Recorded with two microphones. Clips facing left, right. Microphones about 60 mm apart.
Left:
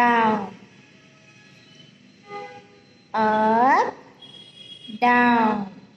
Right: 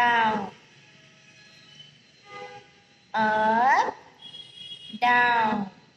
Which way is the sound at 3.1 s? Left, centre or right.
Left.